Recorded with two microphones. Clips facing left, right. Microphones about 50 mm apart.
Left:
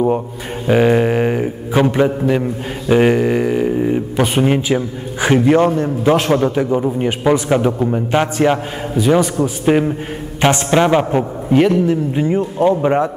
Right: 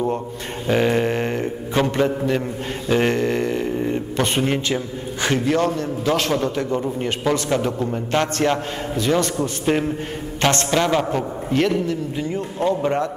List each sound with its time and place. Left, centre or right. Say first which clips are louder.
0.7 s a man's voice: left 6 dB; centre
10.7 s a man's voice: left 6 dB; left